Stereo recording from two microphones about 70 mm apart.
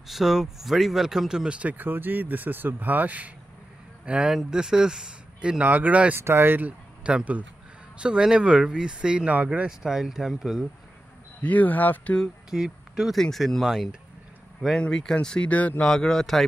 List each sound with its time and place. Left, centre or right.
0.1 s speech: centre
5.6 s speech: right
6.1 s speech: right
7.0 s a man's voice: centre
11.4 s speech: left
12.4 s speech: centre
13.1 s speech: centre
14.8 s speech: centre
15.8 s speech: centre